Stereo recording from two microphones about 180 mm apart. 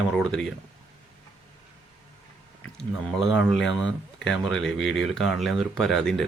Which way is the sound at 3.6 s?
Centre (ahead or behind).